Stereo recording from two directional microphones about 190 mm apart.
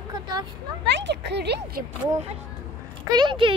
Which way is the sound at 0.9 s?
65° right (ahead or behind).